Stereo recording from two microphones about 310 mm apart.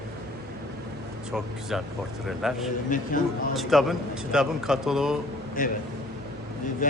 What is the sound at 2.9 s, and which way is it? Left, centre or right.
Speech, left.